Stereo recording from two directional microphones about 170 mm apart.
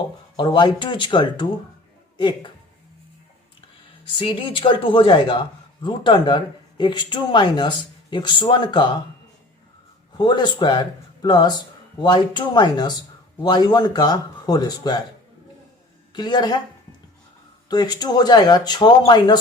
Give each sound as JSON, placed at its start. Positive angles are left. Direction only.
{"t": 0.3, "sound": "a man's voice", "side_deg": 25}
{"t": 4.2, "sound": "a man's voice", "side_deg": 30}
{"t": 10.2, "sound": "a man's voice", "side_deg": 25}
{"t": 16.1, "sound": "a man's voice", "side_deg": 25}
{"t": 17.7, "sound": "a man's voice", "side_deg": 25}